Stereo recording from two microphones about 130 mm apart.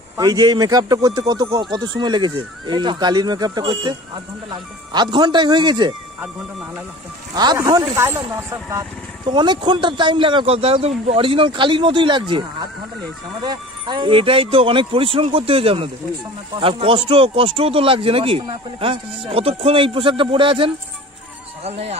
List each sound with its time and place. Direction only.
0.2 s speech: 30° right (ahead or behind)
7.5 s speech: 25° right (ahead or behind)
9.2 s speech: 35° right (ahead or behind)
21.6 s speech: 55° right (ahead or behind)